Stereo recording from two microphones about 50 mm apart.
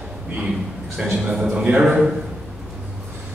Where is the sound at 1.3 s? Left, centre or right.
Centre.